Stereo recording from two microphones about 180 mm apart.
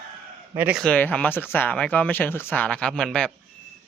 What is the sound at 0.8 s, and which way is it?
Speech, 5° left (ahead or behind).